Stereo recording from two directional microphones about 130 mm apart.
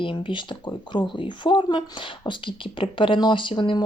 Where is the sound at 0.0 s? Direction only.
40° left (ahead or behind).